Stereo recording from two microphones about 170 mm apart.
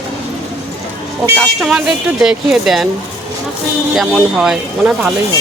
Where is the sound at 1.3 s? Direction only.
Centre (ahead or behind).